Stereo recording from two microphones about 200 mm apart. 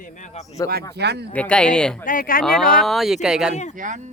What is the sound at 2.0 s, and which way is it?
Speech, 45° left (ahead or behind).